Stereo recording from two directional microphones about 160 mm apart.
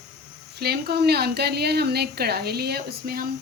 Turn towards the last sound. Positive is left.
turn(degrees=-75)  # may be behind; listen again after turning